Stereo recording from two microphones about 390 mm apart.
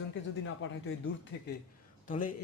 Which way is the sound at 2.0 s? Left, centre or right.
Centre.